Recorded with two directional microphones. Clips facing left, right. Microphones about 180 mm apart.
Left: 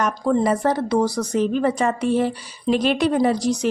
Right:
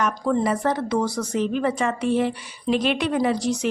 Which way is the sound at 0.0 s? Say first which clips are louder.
Left 2 dB; 35° left (ahead or behind).